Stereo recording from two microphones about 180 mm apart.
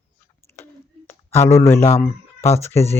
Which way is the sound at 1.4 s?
15° left (ahead or behind).